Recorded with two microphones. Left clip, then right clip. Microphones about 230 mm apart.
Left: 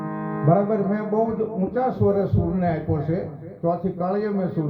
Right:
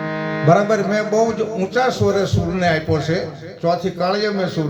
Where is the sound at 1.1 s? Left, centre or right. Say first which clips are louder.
Right 3 dB; centre.